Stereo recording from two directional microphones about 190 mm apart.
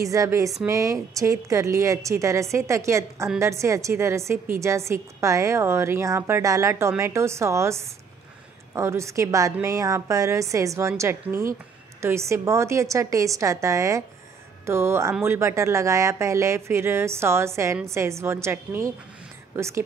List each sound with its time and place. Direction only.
0.0 s speech: 15° right (ahead or behind)